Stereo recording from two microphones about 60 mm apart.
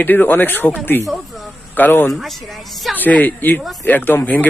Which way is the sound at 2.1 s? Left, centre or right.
Centre.